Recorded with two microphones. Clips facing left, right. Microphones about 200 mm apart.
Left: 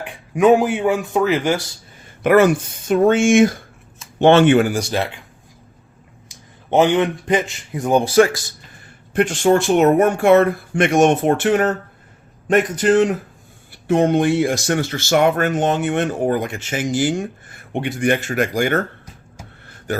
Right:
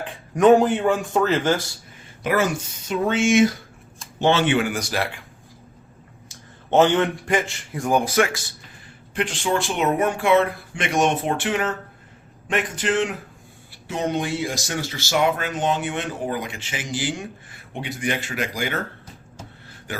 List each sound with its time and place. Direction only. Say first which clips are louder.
0.0 s speech: left 1 dB; 10° left (ahead or behind)
2.2 s speech: left 9 dB; 60° left (ahead or behind)
4.7 s speech: left 4 dB; 25° left (ahead or behind)
6.2 s a man's voice: left 2 dB; 15° left (ahead or behind); by 8.4 s 35° left (ahead or behind)
9.1 s a man's voice: left 8 dB; 45° left (ahead or behind)
13.8 s speech: left 9 dB; 55° left (ahead or behind)